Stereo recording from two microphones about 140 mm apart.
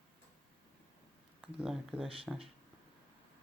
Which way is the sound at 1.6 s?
Centre (ahead or behind).